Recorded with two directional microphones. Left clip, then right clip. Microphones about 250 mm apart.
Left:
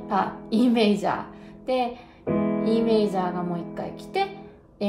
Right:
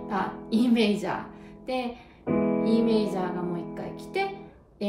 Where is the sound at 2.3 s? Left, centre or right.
Centre.